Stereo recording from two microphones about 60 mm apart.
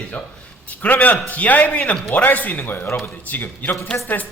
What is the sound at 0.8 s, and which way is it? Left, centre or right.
A man's voice, left.